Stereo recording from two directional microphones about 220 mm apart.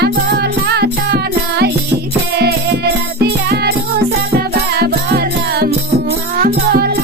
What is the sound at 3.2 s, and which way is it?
Music, 45° right (ahead or behind).